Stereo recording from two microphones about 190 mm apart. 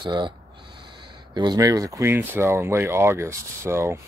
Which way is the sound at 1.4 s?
20° right (ahead or behind).